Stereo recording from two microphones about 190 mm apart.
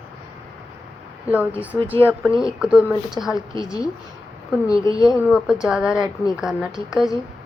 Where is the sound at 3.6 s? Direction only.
20° left (ahead or behind).